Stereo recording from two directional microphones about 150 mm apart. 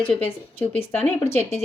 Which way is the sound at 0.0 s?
10° left (ahead or behind).